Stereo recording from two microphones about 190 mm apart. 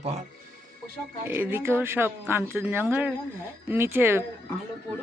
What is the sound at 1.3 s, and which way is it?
A man's voice, 10° right (ahead or behind).